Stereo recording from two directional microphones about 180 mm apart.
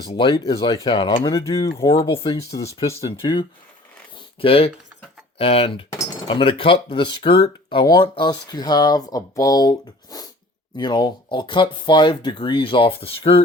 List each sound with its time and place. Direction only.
0.1 s speech: 25° left (ahead or behind)